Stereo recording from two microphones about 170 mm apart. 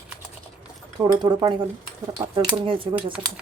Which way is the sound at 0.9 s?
25° right (ahead or behind).